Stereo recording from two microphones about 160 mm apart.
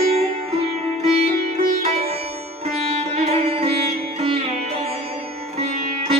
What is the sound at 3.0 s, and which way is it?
Sitar, 40° right (ahead or behind).